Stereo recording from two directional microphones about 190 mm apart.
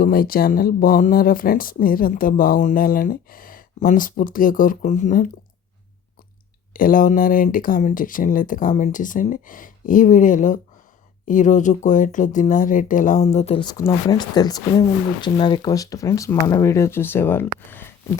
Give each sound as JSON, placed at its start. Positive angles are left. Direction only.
{"t": 0.0, "sound": "speech", "side_deg": 50}
{"t": 6.7, "sound": "speech", "side_deg": 45}